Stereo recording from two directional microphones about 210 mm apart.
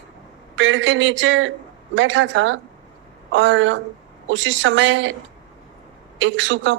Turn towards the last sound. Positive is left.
turn(degrees=-65)  # may be behind; listen again after turning